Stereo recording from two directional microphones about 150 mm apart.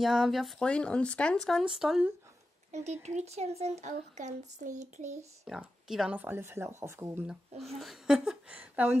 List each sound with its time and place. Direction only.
0.0 s speech: centre (ahead or behind)
2.7 s speech: 50° right (ahead or behind)
5.5 s speech: centre (ahead or behind)
7.6 s speech: centre (ahead or behind)